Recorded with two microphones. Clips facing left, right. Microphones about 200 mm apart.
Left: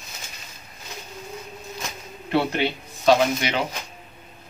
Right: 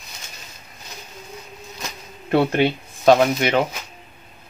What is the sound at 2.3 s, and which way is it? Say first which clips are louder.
Speech: right 5 dB; 50° right (ahead or behind).